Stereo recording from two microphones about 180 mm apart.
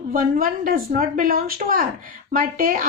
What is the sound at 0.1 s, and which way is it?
Speech, 50° right (ahead or behind).